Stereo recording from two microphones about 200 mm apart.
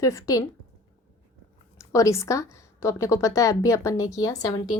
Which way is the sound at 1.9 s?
15° left (ahead or behind).